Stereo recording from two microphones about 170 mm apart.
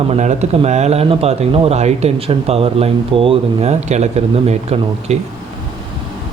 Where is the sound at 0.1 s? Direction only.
40° right (ahead or behind).